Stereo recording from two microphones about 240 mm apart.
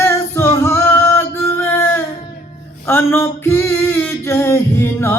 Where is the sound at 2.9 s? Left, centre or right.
Centre.